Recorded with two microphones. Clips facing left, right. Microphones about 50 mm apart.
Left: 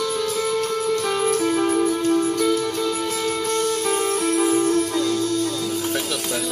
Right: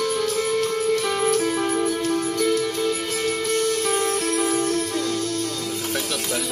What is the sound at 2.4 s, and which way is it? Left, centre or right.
Music, left.